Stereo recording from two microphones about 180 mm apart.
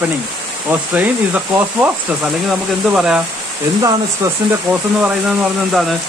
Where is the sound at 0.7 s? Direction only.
10° right (ahead or behind).